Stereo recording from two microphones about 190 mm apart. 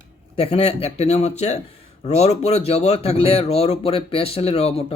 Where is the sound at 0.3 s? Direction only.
35° left (ahead or behind).